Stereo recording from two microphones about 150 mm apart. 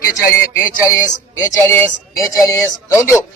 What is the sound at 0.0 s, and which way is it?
A man's voice, 20° left (ahead or behind).